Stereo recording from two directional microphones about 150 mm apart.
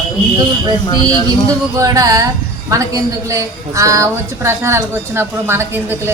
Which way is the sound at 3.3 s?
20° right (ahead or behind).